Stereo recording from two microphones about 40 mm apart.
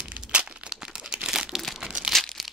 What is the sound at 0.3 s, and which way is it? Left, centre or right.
Crumpling, right.